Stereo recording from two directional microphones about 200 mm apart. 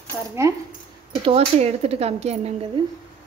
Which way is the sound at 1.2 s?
30° right (ahead or behind).